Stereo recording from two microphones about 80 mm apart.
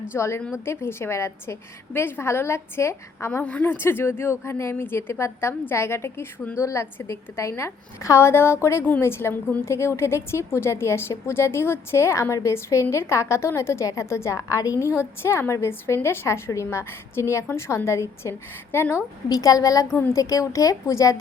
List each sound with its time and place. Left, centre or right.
0.1 s a woman's voice: left
3.4 s a woman's voice: left
19.3 s a woman's voice: left